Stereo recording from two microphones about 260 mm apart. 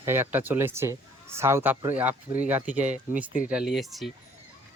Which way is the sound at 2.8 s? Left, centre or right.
Right.